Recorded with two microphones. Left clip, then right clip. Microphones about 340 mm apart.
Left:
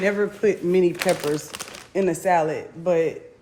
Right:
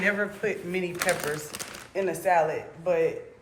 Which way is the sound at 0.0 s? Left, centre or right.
Centre.